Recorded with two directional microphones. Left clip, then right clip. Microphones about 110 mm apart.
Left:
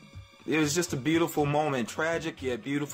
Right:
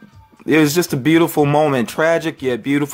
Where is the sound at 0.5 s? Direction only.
40° right (ahead or behind).